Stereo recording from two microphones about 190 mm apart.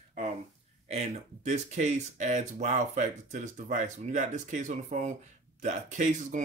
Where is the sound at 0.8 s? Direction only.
35° right (ahead or behind).